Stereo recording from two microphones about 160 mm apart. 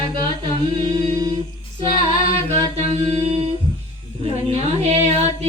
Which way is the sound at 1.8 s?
35° right (ahead or behind).